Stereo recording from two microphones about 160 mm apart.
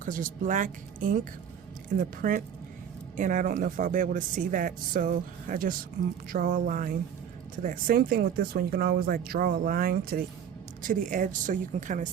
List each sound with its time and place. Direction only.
0.0 s speech: 55° right (ahead or behind)
10.8 s a woman's voice: 55° right (ahead or behind)